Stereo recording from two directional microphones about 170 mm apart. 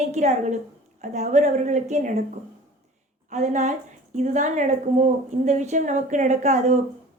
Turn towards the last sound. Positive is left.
turn(degrees=-45)  # may be behind; listen again after turning